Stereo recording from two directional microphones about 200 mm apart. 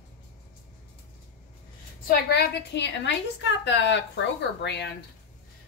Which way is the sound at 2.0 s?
55° left (ahead or behind).